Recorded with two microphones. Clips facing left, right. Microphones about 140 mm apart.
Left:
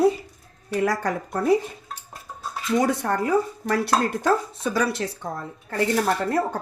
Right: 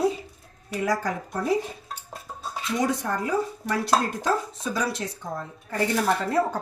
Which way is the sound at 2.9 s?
65° left (ahead or behind).